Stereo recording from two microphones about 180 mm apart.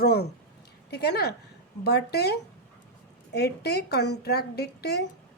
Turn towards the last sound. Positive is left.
turn(degrees=65)  # may be behind; listen again after turning